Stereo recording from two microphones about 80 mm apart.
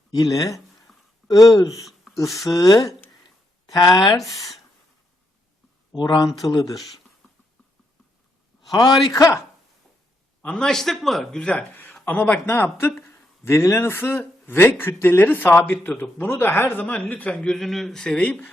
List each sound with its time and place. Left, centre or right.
0.1 s speech: left
2.1 s a sound: centre
2.5 s speech: left
3.7 s speech: left
4.2 s speech: centre
5.9 s speech: left
6.5 s speech: left
8.7 s a man's voice: left
9.1 s speech: left
10.4 s a man's voice: centre